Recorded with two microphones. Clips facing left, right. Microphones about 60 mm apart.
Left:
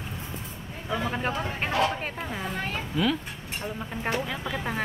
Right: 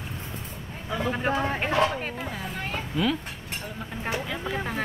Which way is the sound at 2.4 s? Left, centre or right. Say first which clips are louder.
Left 1 dB; centre.